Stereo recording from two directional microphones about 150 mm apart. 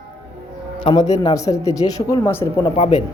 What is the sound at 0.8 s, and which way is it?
A man's voice, 30° left (ahead or behind).